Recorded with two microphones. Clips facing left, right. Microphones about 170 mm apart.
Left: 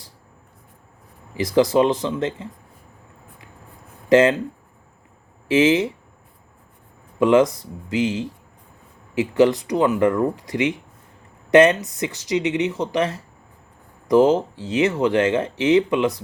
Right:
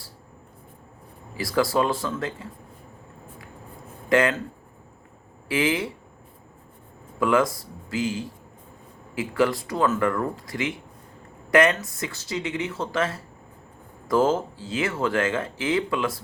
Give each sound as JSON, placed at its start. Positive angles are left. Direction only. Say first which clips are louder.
{"t": 1.4, "sound": "speech", "louder": "left 6 dB", "side_deg": 20}
{"t": 4.1, "sound": "speech", "louder": "left 6 dB", "side_deg": 25}
{"t": 5.5, "sound": "speech", "louder": "left 8 dB", "side_deg": 25}
{"t": 7.2, "sound": "speech", "louder": "left 6 dB", "side_deg": 20}